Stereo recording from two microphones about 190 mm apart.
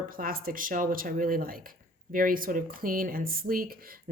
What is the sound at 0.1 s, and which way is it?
A woman's voice, 50° right (ahead or behind).